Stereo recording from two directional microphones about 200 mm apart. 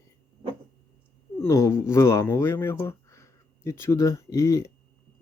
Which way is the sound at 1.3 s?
15° left (ahead or behind).